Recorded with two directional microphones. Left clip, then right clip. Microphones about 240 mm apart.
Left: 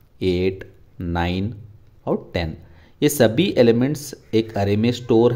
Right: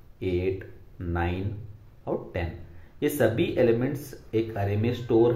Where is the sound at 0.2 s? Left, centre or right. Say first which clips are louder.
Left 7 dB; left.